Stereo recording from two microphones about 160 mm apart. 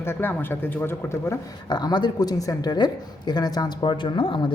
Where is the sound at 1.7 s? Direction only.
25° left (ahead or behind).